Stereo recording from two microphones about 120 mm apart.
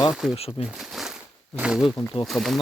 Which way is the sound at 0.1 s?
5° right (ahead or behind).